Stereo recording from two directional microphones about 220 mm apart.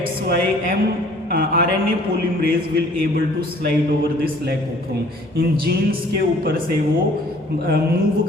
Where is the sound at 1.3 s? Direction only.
45° right (ahead or behind).